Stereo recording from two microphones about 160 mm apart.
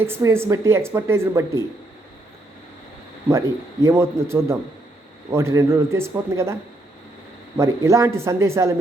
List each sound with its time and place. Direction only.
0.0 s speech: 15° right (ahead or behind)
3.8 s speech: 15° right (ahead or behind)